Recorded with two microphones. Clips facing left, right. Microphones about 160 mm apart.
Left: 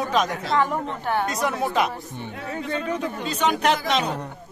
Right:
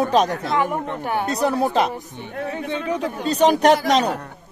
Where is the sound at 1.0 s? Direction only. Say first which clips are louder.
Left 1 dB; 15° right (ahead or behind).